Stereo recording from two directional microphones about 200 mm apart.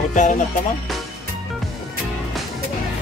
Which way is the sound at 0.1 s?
40° left (ahead or behind).